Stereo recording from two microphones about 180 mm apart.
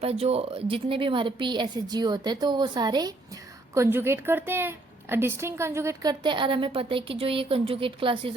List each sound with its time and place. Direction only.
0.0 s speech: 35° right (ahead or behind)